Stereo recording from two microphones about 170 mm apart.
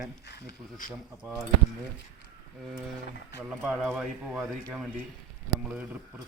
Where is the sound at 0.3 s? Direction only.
75° left (ahead or behind).